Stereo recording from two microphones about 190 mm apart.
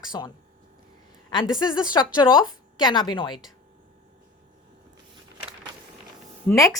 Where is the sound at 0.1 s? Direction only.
20° left (ahead or behind).